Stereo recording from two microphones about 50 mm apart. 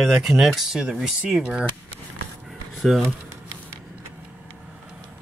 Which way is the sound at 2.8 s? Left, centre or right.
Centre.